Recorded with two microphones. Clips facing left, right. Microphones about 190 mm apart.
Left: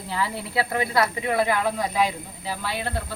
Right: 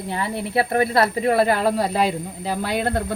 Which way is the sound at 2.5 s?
50° right (ahead or behind).